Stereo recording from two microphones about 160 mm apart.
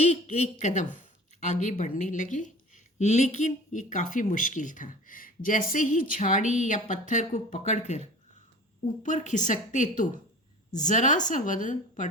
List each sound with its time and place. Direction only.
0.0 s a woman's voice: 45° left (ahead or behind)
9.0 s a woman's voice: 50° left (ahead or behind)